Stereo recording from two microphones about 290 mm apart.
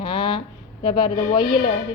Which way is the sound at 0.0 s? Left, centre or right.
Centre.